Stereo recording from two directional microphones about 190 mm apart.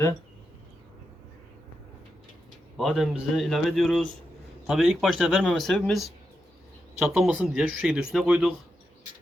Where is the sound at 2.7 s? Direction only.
Centre (ahead or behind).